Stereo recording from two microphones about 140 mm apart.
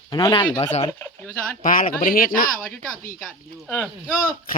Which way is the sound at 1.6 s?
80° left.